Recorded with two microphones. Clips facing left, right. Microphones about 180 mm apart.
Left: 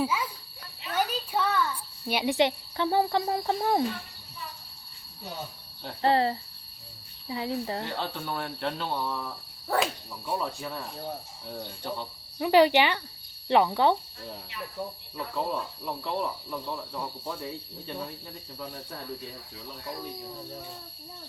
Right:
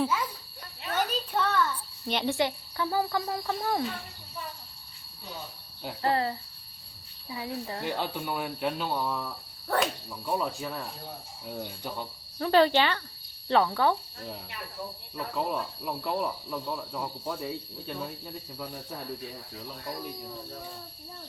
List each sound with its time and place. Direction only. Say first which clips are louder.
0.0 s a sound: even; 10° left (ahead or behind)
2.0 s speech: left 3 dB; 10° left (ahead or behind); by 3.8 s 30° left (ahead or behind)
6.0 s speech: left 4 dB; 25° left (ahead or behind)
7.3 s speech: left 4 dB; 25° left (ahead or behind)
7.9 s speech: right 2 dB; 15° right (ahead or behind)
12.4 s speech: left 2 dB; 15° left (ahead or behind)
15.8 s speech: right 2 dB; 10° right (ahead or behind)